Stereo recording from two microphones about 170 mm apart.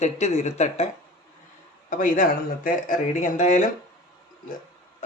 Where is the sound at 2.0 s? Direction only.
50° left (ahead or behind).